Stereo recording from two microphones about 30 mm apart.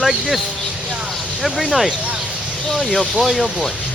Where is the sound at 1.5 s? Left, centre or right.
Centre.